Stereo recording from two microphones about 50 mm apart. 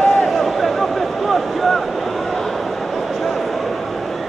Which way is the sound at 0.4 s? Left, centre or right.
Centre.